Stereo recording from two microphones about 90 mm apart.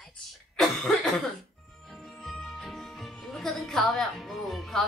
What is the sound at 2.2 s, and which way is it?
Music, centre (ahead or behind).